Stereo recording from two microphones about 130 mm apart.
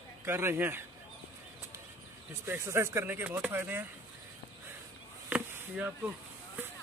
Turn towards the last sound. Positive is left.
turn(degrees=-15)  # may be behind; listen again after turning